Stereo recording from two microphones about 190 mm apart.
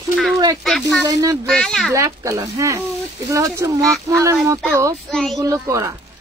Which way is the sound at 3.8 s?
Centre (ahead or behind).